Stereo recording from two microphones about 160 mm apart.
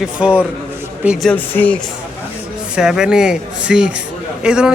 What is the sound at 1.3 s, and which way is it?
Speech, 10° left (ahead or behind).